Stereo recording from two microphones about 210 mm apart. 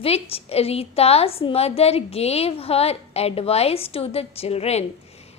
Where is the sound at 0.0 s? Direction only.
30° left (ahead or behind).